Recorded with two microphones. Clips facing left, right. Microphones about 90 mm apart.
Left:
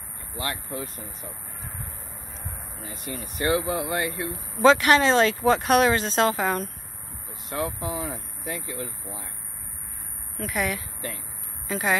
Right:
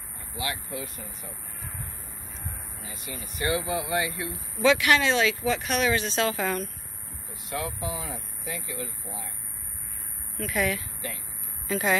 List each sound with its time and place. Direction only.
0.4 s speech: 40° left (ahead or behind)
2.8 s speech: 40° left (ahead or behind)
3.1 s speech: 50° left (ahead or behind)
6.3 s speech: 35° left (ahead or behind)
10.5 s speech: 20° left (ahead or behind)